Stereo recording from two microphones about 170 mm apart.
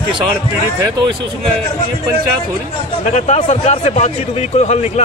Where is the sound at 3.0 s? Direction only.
40° left (ahead or behind).